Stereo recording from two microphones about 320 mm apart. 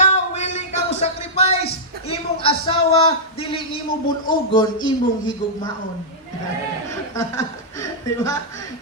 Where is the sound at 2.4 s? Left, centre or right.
Centre.